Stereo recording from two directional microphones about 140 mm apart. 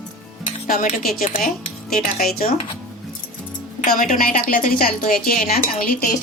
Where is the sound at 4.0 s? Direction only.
85° left.